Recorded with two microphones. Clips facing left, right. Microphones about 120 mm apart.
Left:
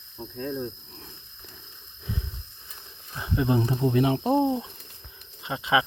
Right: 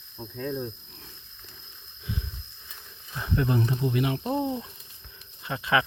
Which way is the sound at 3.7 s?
35° left (ahead or behind).